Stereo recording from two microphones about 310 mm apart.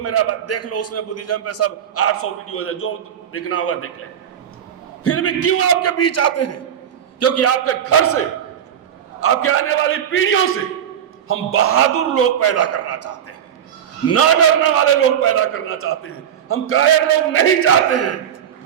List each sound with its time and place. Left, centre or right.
0.0 s a man's voice: left
5.0 s a man's voice: left
9.2 s a man's voice: left